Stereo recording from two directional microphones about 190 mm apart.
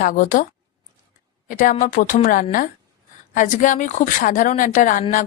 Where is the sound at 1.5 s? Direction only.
45° left (ahead or behind).